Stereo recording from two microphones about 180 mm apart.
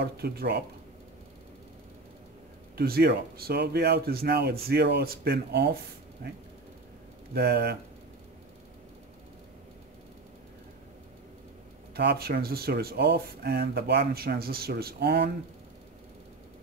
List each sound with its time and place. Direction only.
0.0 s speech: 60° right (ahead or behind)
2.8 s speech: 60° right (ahead or behind)
7.3 s speech: 60° right (ahead or behind)
11.9 s speech: 60° right (ahead or behind)